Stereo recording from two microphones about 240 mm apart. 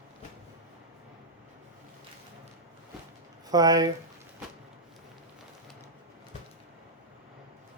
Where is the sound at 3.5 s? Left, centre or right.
Centre.